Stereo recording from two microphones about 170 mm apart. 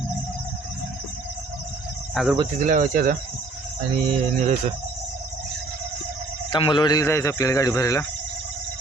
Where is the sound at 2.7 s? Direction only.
55° right (ahead or behind).